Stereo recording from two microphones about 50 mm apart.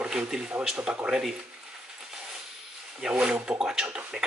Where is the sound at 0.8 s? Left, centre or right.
Centre.